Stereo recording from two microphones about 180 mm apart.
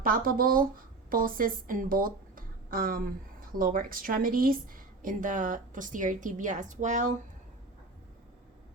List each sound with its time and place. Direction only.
0.0 s speech: 50° right (ahead or behind)